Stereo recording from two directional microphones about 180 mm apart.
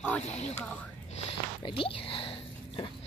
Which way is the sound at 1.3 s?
30° left (ahead or behind).